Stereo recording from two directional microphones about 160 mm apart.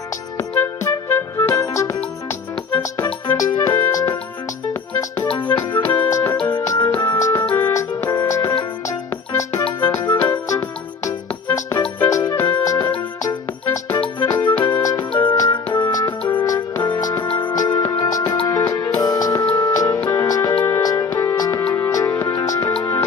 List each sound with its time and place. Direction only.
0.4 s music: 15° left (ahead or behind)
5.3 s music: 30° left (ahead or behind)
9.8 s music: 25° left (ahead or behind)
14.4 s music: 25° left (ahead or behind)